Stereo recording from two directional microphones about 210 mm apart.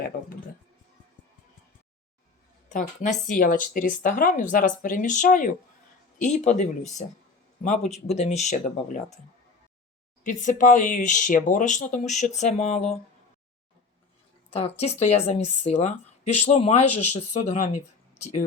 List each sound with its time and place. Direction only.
2.6 s speech: 35° left (ahead or behind)
10.2 s speech: 40° left (ahead or behind)
14.5 s speech: 30° left (ahead or behind)